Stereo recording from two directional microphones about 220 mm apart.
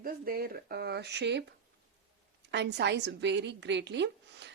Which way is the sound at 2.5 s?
50° right (ahead or behind).